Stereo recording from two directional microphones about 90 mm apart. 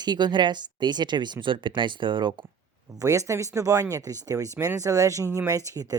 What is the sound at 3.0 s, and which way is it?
Speech, 35° right (ahead or behind).